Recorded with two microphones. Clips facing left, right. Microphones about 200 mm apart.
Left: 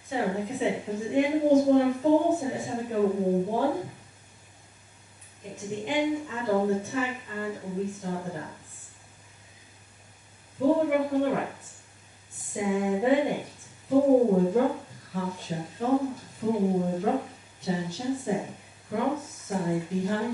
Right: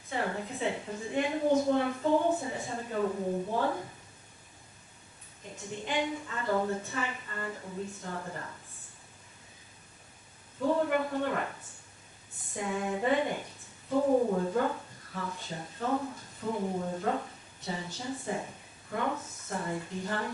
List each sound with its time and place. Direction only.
0.1 s speech: 10° left (ahead or behind)
5.9 s speech: 10° left (ahead or behind)
10.6 s speech: 15° left (ahead or behind)
12.5 s speech: 10° left (ahead or behind)
13.9 s speech: 20° left (ahead or behind)